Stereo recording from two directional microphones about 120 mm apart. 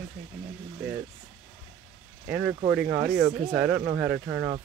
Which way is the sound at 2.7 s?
15° right (ahead or behind).